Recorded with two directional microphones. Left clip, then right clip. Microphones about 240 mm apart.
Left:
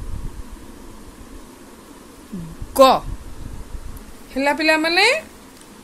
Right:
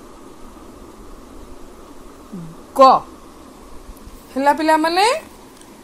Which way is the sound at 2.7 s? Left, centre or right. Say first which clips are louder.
Right 2 dB; left.